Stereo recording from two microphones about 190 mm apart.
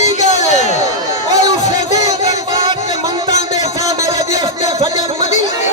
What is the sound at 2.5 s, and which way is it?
Music, 20° right (ahead or behind).